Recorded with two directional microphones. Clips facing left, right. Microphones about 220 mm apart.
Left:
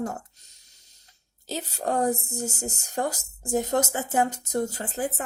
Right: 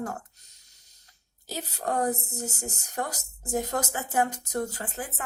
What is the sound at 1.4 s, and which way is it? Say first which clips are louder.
Speech: left 3 dB; 25° left (ahead or behind).